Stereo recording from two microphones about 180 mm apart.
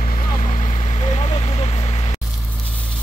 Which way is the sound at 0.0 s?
45° left (ahead or behind).